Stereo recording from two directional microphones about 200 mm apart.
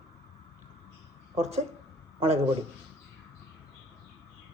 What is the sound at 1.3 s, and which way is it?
Speech, 30° right (ahead or behind).